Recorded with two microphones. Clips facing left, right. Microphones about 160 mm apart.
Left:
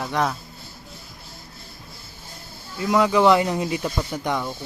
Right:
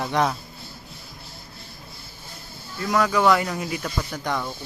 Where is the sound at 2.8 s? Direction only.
15° left (ahead or behind).